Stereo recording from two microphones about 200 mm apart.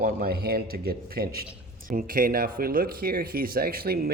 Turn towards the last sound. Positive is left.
turn(degrees=-50)  # may be behind; listen again after turning